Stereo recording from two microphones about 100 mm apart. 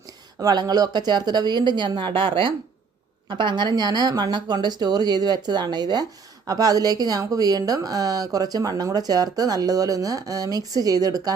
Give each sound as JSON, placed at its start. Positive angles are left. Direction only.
{"t": 0.3, "sound": "a woman's voice", "side_deg": -40}